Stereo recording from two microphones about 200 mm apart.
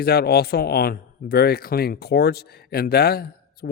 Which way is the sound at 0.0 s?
50° left (ahead or behind).